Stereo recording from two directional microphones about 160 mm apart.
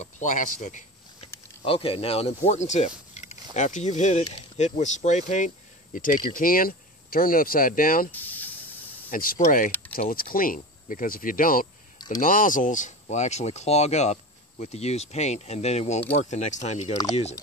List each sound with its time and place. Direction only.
0.0 s a sound: 50° left (ahead or behind)
1.6 s speech: 35° left (ahead or behind)
5.9 s speech: 60° left (ahead or behind)
8.1 s spray: 10° left (ahead or behind)
9.1 s speech: 60° left (ahead or behind); by 17.4 s 40° left (ahead or behind)